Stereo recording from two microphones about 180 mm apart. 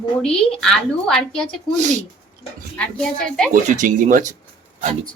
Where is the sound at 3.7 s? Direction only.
45° right (ahead or behind).